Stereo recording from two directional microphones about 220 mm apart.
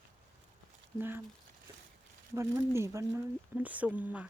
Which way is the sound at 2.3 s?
15° right (ahead or behind).